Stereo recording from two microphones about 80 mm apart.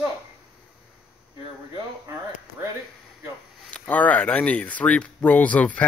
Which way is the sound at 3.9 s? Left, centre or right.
Centre.